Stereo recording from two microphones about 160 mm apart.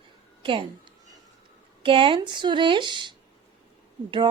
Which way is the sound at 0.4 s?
30° right (ahead or behind).